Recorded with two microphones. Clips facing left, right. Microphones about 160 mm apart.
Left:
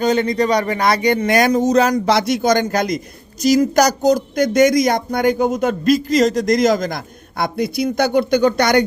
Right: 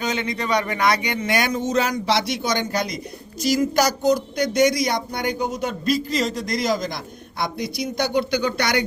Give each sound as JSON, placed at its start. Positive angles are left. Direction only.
{"t": 0.0, "sound": "speech", "side_deg": 35}